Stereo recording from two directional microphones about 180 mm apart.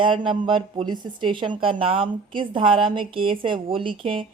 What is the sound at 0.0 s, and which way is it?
Speech, 25° right (ahead or behind).